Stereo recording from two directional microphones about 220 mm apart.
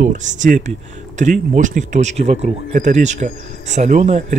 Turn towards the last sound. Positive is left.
turn(degrees=-30)  # may be behind; listen again after turning